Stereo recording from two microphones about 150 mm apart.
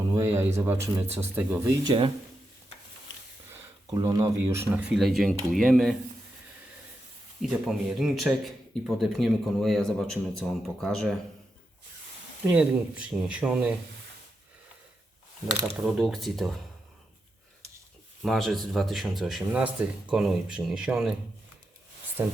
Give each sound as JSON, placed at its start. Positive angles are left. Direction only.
{"t": 0.0, "sound": "speech", "side_deg": -20}
{"t": 1.6, "sound": "speech", "side_deg": -30}
{"t": 3.9, "sound": "speech", "side_deg": -20}
{"t": 4.7, "sound": "speech", "side_deg": -5}
{"t": 7.4, "sound": "speech", "side_deg": 0}
{"t": 12.5, "sound": "speech", "side_deg": -5}
{"t": 15.8, "sound": "speech", "side_deg": 0}
{"t": 18.2, "sound": "speech", "side_deg": 0}